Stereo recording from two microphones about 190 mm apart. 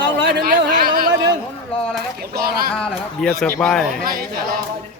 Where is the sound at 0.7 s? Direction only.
50° right (ahead or behind).